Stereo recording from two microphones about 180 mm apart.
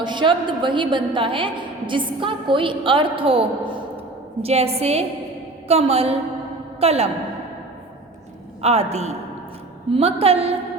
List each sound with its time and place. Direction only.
0.0 s a woman's voice: 25° right (ahead or behind)
8.6 s a woman's voice: 35° right (ahead or behind)